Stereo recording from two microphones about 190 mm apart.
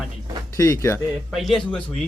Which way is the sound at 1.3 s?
Centre (ahead or behind).